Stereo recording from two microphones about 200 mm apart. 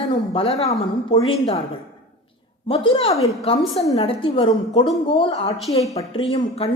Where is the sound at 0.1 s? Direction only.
30° left (ahead or behind).